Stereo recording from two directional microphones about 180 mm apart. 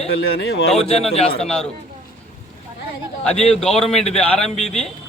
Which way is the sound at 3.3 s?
35° left (ahead or behind).